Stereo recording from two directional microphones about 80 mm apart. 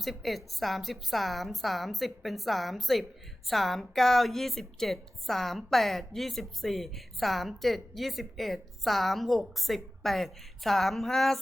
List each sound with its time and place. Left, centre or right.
0.0 s a woman's voice: centre